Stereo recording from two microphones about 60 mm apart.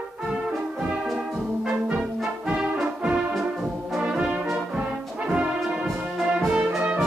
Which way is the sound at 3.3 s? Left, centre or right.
Centre.